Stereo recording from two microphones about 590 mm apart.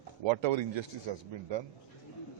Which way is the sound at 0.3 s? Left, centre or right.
Right.